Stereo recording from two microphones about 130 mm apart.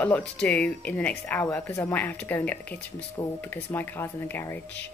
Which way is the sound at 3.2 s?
30° left (ahead or behind).